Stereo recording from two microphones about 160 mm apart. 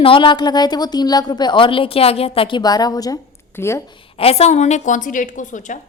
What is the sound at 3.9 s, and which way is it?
A woman's voice, 35° left (ahead or behind).